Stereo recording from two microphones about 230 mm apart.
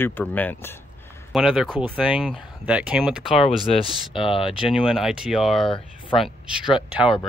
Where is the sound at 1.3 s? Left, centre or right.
Centre.